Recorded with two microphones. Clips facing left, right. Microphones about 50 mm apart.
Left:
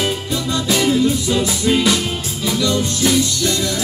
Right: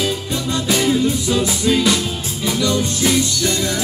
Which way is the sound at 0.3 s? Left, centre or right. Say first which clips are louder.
Left 1 dB; right.